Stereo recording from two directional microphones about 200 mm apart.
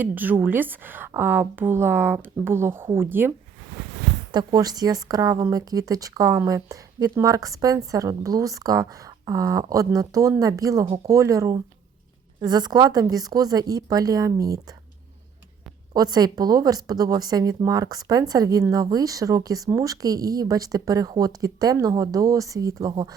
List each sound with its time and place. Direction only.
0.0 s a woman's voice: 10° right (ahead or behind)
15.9 s a woman's voice: 20° right (ahead or behind)